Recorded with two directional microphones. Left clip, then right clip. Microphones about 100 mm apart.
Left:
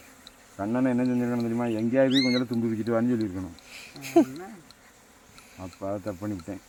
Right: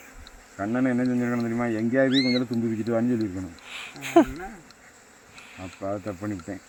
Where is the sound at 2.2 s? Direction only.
65° right (ahead or behind).